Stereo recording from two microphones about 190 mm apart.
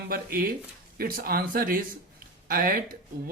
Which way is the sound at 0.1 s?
50° right (ahead or behind).